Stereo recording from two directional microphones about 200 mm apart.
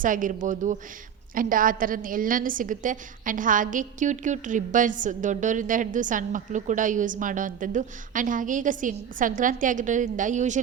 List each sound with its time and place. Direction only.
0.0 s a woman's voice: 40° right (ahead or behind)